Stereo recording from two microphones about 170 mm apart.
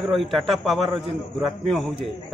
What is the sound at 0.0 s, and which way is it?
A man's voice, centre (ahead or behind).